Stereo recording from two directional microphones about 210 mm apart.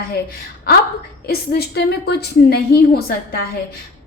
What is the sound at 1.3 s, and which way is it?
A woman's voice, 50° left (ahead or behind).